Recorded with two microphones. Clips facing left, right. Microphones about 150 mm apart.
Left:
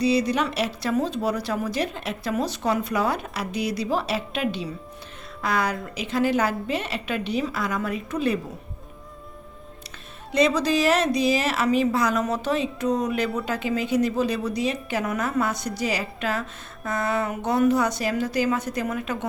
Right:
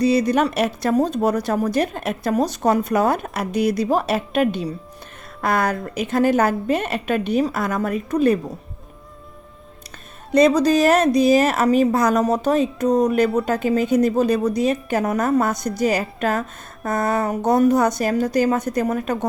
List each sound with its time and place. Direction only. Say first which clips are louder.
0.0 s a woman's voice: right 5 dB; 50° right (ahead or behind)
10.3 s a woman's voice: right 6 dB; 45° right (ahead or behind)